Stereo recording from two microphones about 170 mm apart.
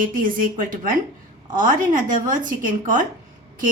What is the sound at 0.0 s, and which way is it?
A woman's voice, 55° right (ahead or behind).